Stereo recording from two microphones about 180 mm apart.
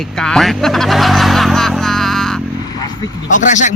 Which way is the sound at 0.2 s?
5° left (ahead or behind).